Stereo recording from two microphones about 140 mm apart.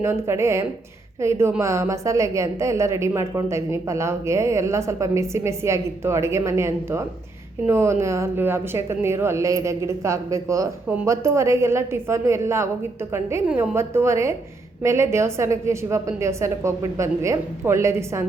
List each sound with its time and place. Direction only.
0.0 s a woman's voice: 20° right (ahead or behind)